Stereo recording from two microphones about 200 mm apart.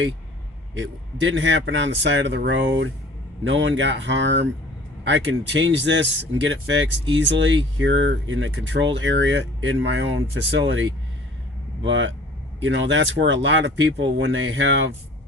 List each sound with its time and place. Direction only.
0.7 s speech: 65° right (ahead or behind)